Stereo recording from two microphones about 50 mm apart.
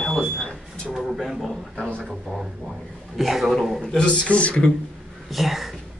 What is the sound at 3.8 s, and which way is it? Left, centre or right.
Speech, centre.